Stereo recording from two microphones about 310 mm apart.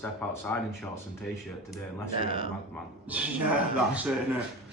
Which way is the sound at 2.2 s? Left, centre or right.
Centre.